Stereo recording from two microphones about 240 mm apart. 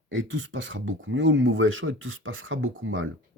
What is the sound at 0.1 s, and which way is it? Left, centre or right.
Speech, right.